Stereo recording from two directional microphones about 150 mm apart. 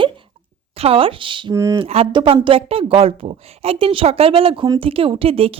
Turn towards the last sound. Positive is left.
turn(degrees=-40)  # may be behind; listen again after turning